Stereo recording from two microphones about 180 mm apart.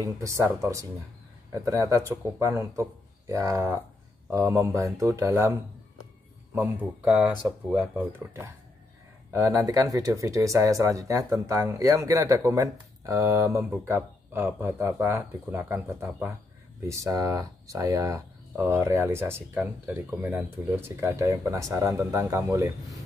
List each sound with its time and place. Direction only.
0.2 s speech: 15° right (ahead or behind)
19.6 s speech: 5° right (ahead or behind)